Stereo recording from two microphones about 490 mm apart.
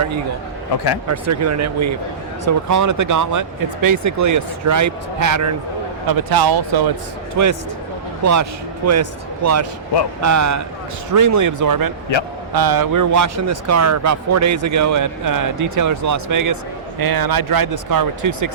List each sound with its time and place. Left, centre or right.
1.0 s a man's voice: right
7.4 s a man's voice: right